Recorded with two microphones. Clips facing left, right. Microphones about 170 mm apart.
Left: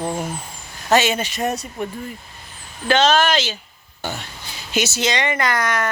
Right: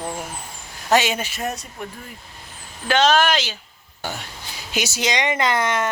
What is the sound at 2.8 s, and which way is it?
Speech, 10° right (ahead or behind).